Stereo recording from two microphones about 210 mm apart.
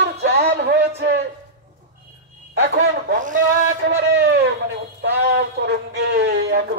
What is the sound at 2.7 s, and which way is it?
Speech, 40° right (ahead or behind).